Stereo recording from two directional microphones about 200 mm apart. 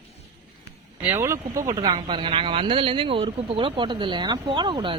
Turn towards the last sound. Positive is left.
turn(degrees=-25)  # may be behind; listen again after turning